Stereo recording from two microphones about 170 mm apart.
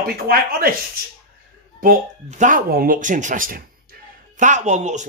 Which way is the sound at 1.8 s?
50° right (ahead or behind).